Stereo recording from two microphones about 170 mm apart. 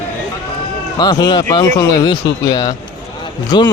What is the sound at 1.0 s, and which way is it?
A man's voice, 25° left (ahead or behind).